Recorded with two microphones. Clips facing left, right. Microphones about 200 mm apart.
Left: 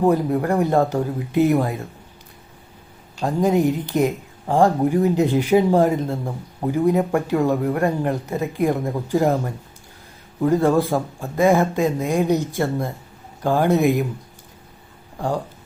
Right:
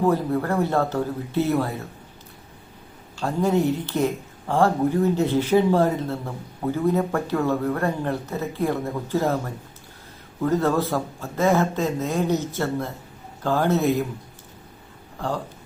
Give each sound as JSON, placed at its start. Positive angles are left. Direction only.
{"t": 0.0, "sound": "speech", "side_deg": 15}
{"t": 3.2, "sound": "speech", "side_deg": 15}
{"t": 10.4, "sound": "speech", "side_deg": 15}